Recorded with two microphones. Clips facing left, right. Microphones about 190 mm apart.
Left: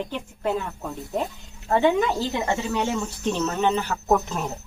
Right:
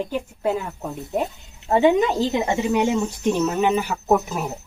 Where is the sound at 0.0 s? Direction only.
10° right (ahead or behind).